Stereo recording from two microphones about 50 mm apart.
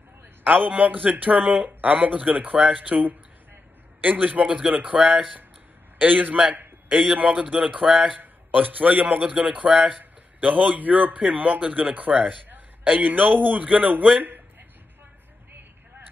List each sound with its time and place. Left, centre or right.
0.4 s speech: right
4.5 s a man's voice: centre; by 6.4 s right
6.5 s a sound: right
7.2 s a man's voice: right
8.2 s a man's voice: right
12.3 s a sound: right
13.0 s speech: right
13.7 s a man's voice: right